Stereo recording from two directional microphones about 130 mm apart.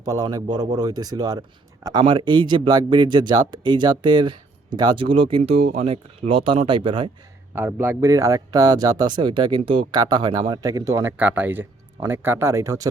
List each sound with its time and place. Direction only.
0.0 s speech: 30° right (ahead or behind)
5.4 s speech: 55° right (ahead or behind)
7.8 s speech: 20° right (ahead or behind)
11.0 s speech: 15° right (ahead or behind)